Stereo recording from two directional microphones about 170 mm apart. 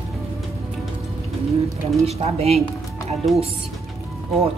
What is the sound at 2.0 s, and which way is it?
Speech, 35° right (ahead or behind).